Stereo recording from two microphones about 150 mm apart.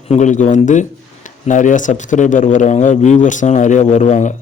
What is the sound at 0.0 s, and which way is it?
Speech, 50° left (ahead or behind).